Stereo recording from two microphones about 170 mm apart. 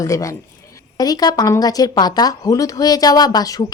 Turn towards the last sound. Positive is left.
turn(degrees=20)  # may be behind; listen again after turning